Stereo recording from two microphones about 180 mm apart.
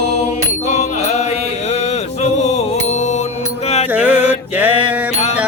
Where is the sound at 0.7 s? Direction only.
40° left (ahead or behind).